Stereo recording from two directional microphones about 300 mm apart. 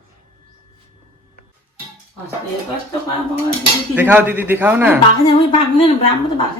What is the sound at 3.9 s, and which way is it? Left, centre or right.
A man's voice, centre.